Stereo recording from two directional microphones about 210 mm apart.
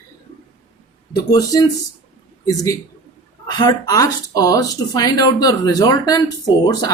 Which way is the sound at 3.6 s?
20° left (ahead or behind).